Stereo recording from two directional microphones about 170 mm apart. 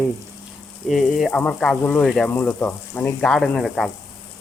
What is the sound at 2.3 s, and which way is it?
Speech, 15° left (ahead or behind).